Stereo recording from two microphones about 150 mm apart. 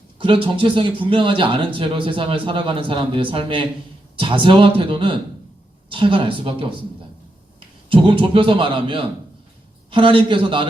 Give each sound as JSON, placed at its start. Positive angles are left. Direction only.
{"t": 0.2, "sound": "a man's voice", "side_deg": -35}
{"t": 7.9, "sound": "a man's voice", "side_deg": -35}